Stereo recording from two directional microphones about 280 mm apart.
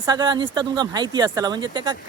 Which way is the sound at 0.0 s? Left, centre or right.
Centre.